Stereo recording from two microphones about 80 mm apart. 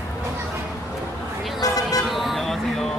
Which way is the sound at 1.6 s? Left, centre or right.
Left.